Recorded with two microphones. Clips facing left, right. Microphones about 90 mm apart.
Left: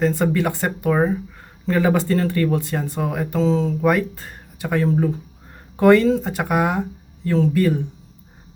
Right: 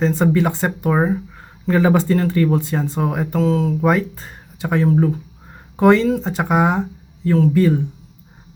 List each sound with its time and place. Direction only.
0.0 s speech: 20° right (ahead or behind)
3.3 s speech: 5° right (ahead or behind)
3.8 s speech: 20° right (ahead or behind)